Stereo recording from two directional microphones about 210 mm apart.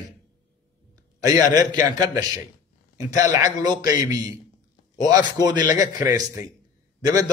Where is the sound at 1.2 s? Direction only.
15° right (ahead or behind).